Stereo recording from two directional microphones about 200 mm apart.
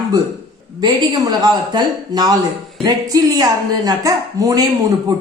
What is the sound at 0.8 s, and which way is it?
Speech, 20° right (ahead or behind).